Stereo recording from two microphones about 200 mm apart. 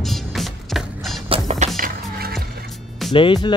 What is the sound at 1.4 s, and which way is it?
Music, 40° right (ahead or behind).